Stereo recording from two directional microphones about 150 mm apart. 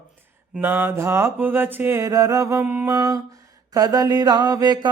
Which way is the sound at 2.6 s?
10° right (ahead or behind).